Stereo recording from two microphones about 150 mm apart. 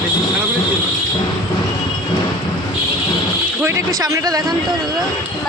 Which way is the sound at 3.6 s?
20° right (ahead or behind).